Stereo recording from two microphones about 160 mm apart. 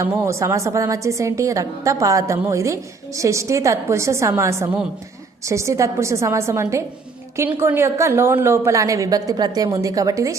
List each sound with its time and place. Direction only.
0.0 s a woman's voice: 20° right (ahead or behind)